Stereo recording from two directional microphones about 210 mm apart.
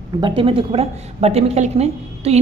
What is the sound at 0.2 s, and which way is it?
A woman's voice, 25° right (ahead or behind).